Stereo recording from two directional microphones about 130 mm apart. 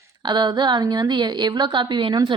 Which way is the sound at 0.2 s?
35° right (ahead or behind).